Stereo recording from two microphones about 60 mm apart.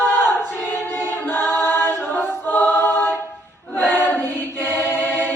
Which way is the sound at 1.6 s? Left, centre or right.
Left.